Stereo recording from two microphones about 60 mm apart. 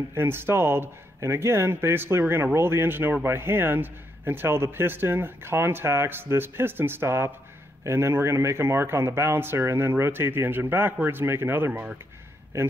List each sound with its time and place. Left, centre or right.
0.1 s speech: right